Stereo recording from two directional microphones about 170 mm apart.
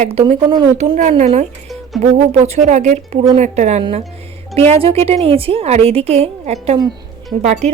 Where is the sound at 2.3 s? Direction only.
40° right (ahead or behind).